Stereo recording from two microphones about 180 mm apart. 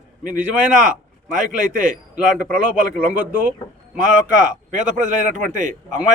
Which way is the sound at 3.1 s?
5° right (ahead or behind).